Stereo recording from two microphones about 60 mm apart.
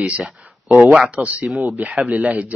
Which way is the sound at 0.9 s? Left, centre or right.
Centre.